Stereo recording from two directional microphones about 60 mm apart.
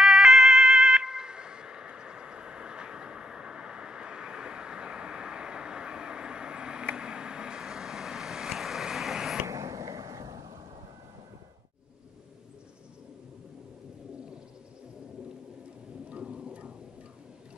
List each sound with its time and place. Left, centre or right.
0.0 s emergency vehicle: centre
7.0 s vehicle: centre
9.5 s arrow: right
16.1 s a sound: centre